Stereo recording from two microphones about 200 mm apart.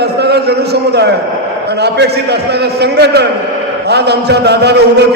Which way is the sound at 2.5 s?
55° right (ahead or behind).